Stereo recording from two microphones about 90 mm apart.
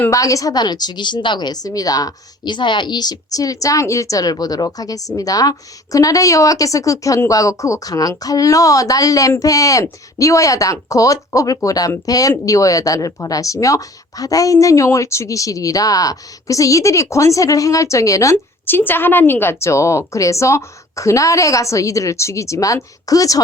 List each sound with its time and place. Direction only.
0.1 s a woman's voice: 40° left (ahead or behind)